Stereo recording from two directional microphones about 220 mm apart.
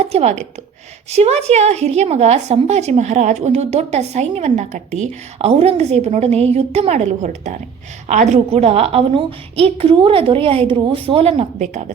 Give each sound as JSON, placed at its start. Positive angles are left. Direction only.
{"t": 0.0, "sound": "a woman's voice", "side_deg": -30}